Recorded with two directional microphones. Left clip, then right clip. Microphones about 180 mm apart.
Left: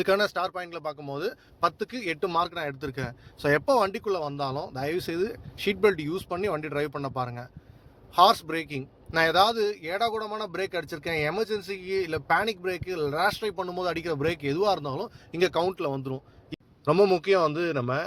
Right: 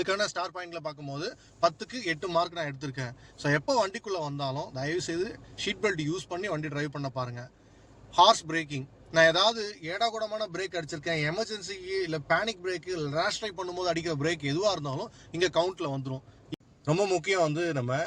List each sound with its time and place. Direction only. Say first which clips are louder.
0.0 s a man's voice: left 5 dB; 50° left (ahead or behind)